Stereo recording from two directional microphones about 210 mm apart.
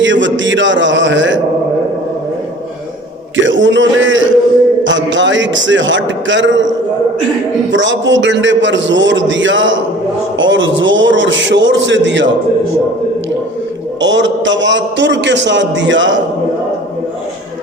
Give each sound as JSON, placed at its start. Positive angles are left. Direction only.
{"t": 0.0, "sound": "a man's voice", "side_deg": -60}
{"t": 3.3, "sound": "a sound", "side_deg": -60}
{"t": 4.8, "sound": "a man's voice", "side_deg": -60}
{"t": 7.7, "sound": "a man's voice", "side_deg": -60}
{"t": 14.0, "sound": "a man's voice", "side_deg": -60}